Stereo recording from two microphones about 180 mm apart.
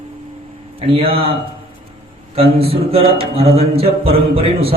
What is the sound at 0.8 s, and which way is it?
Speech, 35° right (ahead or behind).